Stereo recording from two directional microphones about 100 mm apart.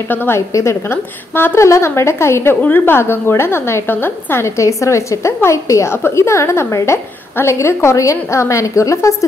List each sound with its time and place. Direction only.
0.1 s a woman's voice: 20° left (ahead or behind)
0.5 s a woman's voice: 30° left (ahead or behind)